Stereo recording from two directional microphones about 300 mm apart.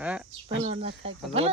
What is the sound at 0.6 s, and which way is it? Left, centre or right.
Speech, right.